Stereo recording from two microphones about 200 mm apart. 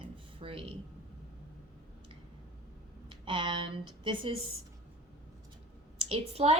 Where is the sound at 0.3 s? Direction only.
25° right (ahead or behind).